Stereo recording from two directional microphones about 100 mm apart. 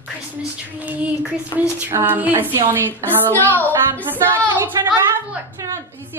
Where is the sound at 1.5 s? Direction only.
35° left (ahead or behind).